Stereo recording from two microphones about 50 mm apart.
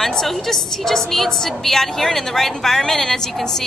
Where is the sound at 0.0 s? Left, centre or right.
Centre.